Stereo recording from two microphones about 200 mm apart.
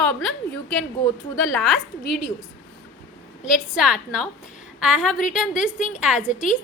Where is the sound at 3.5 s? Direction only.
5° right (ahead or behind).